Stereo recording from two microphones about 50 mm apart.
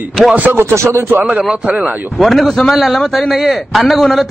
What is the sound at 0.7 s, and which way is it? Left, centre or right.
Speech, right.